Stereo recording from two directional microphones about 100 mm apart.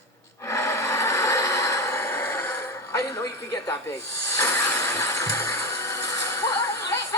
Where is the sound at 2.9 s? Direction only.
35° left (ahead or behind).